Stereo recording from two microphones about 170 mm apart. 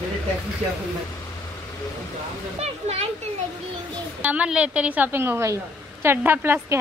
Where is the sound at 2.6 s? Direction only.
40° right (ahead or behind).